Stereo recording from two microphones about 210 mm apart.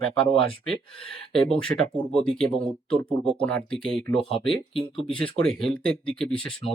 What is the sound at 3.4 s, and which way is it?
Speech, 5° left (ahead or behind).